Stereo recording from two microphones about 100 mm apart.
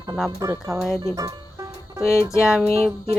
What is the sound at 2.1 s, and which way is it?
Music, 30° left (ahead or behind).